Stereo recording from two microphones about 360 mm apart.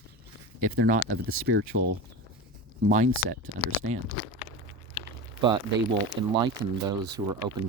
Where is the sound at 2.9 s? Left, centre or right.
Centre.